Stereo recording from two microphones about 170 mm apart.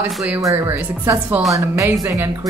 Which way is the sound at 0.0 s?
15° right (ahead or behind).